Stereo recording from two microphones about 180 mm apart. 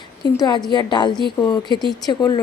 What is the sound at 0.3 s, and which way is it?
A woman's voice, 25° left (ahead or behind).